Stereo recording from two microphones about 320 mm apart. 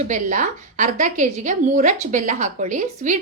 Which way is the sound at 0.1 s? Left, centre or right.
Right.